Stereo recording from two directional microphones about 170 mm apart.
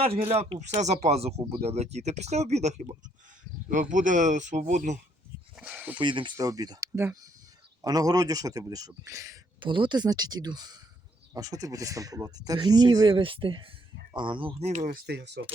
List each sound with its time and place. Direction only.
0.0 s speech: 35° right (ahead or behind)
3.9 s speech: 50° right (ahead or behind)
5.5 s a sound: 5° right (ahead or behind)
6.0 s speech: 30° right (ahead or behind)
9.6 s speech: 30° right (ahead or behind)
15.0 s speech: 80° right